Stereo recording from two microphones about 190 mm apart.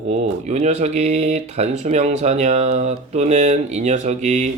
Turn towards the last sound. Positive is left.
turn(degrees=-35)  # may be behind; listen again after turning